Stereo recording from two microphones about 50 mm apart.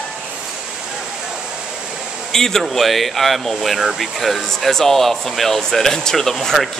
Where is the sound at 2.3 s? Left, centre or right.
Centre.